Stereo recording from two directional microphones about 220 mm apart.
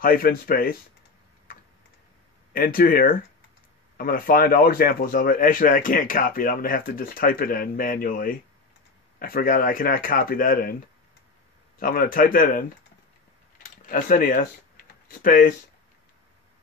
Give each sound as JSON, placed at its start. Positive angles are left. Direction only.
{"t": 0.0, "sound": "speech", "side_deg": 40}
{"t": 2.5, "sound": "speech", "side_deg": 40}
{"t": 11.8, "sound": "speech", "side_deg": 40}
{"t": 13.8, "sound": "speech", "side_deg": 40}